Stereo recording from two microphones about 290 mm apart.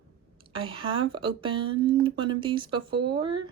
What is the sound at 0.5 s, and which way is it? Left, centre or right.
Speech, centre.